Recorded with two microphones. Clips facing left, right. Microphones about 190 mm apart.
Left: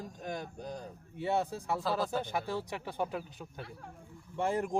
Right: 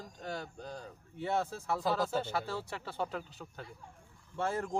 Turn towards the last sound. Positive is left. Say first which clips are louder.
# left 3 dB
turn(degrees=15)  # may be behind; listen again after turning